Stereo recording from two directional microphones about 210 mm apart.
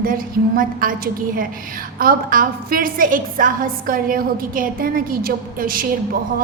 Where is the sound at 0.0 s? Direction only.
40° right (ahead or behind).